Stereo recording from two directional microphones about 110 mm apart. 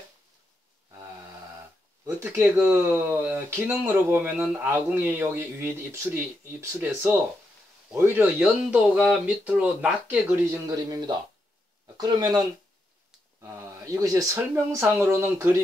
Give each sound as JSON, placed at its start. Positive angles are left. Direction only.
{"t": 2.0, "sound": "speech", "side_deg": -20}
{"t": 9.2, "sound": "speech", "side_deg": -15}
{"t": 10.7, "sound": "speech", "side_deg": -40}